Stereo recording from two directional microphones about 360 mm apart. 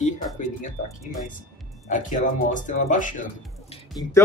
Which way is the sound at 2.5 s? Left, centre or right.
Left.